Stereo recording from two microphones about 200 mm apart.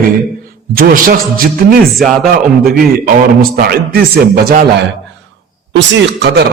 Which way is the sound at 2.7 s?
45° right (ahead or behind).